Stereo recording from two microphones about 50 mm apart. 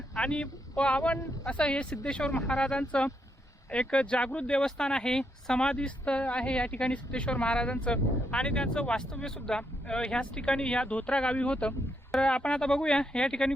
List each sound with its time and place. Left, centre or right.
0.2 s speech: centre